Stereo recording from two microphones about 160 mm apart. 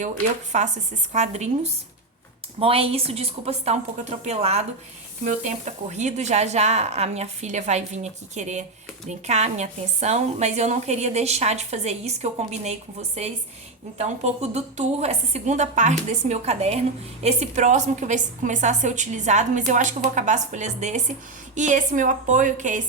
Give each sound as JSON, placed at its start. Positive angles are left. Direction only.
{"t": 0.5, "sound": "a woman's voice", "side_deg": -45}